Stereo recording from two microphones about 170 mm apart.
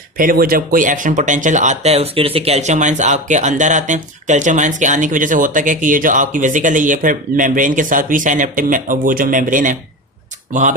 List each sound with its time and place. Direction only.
0.2 s speech: 60° right (ahead or behind)